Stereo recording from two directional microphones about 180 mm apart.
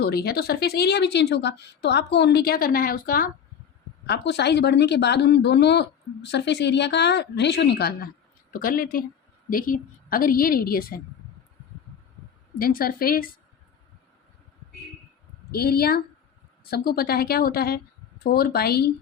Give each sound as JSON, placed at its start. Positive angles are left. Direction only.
{"t": 0.0, "sound": "a woman's voice", "side_deg": 60}
{"t": 4.0, "sound": "a woman's voice", "side_deg": 70}
{"t": 12.5, "sound": "a woman's voice", "side_deg": 55}
{"t": 15.5, "sound": "a woman's voice", "side_deg": 60}